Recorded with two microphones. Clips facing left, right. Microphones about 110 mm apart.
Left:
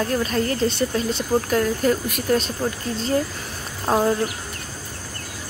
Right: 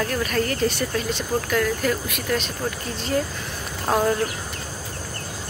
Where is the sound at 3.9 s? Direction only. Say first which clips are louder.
Left 1 dB; 15° left (ahead or behind).